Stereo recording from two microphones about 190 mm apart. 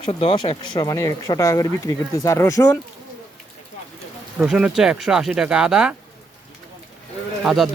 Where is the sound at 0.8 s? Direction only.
20° left (ahead or behind).